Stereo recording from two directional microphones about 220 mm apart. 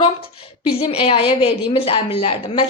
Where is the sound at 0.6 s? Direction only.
25° left (ahead or behind).